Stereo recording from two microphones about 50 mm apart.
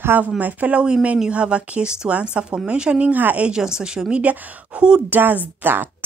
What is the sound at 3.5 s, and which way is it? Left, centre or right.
Speech, centre.